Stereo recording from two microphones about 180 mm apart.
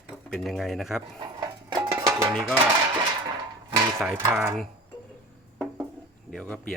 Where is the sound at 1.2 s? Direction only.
25° right (ahead or behind).